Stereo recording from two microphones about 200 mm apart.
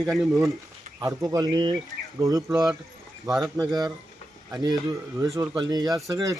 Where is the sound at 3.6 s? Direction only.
20° right (ahead or behind).